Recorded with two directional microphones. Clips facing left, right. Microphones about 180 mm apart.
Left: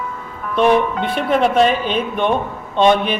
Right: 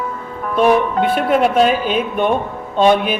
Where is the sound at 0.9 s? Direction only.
45° right (ahead or behind).